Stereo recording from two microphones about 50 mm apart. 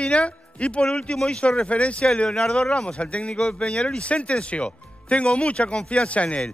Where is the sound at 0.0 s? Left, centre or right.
Left.